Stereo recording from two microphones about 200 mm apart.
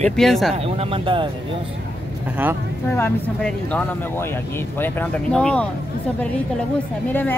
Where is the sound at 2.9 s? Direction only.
10° left (ahead or behind).